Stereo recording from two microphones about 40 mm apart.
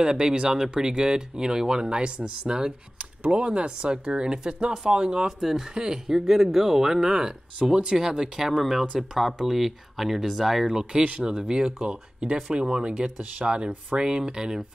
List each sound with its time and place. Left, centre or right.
0.0 s speech: centre
3.0 s speech: right
8.4 s speech: centre
10.9 s speech: right
13.2 s speech: right
13.9 s speech: right